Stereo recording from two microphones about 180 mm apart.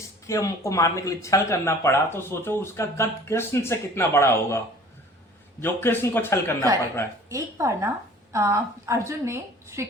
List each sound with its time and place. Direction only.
0.3 s speech: 15° left (ahead or behind)
7.3 s a woman's voice: 15° right (ahead or behind)